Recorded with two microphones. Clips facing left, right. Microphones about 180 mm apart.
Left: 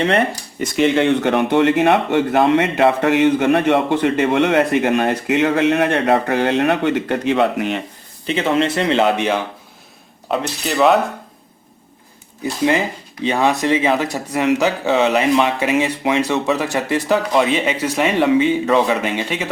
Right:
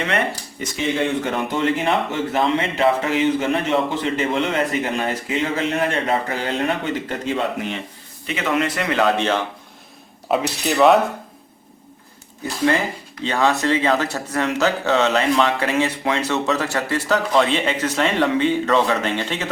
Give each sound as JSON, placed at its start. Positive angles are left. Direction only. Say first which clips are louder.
{"t": 0.8, "sound": "a man's voice", "louder": "left 6 dB", "side_deg": 70}
{"t": 8.3, "sound": "speech", "louder": "left 4 dB", "side_deg": 30}
{"t": 10.2, "sound": "speech", "louder": "right 1 dB", "side_deg": 0}
{"t": 13.2, "sound": "speech", "louder": "left 2 dB", "side_deg": 15}